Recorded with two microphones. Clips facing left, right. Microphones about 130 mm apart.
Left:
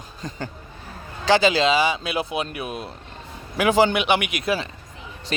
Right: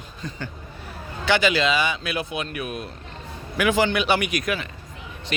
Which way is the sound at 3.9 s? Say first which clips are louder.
Even; 15° left (ahead or behind).